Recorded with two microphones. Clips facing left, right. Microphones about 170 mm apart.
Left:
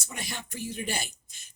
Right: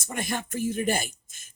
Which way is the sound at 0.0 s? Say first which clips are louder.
Right 8 dB; 50° right (ahead or behind).